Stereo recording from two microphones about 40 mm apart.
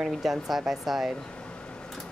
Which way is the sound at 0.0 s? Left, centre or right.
Centre.